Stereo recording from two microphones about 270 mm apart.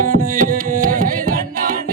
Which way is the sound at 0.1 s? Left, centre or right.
Right.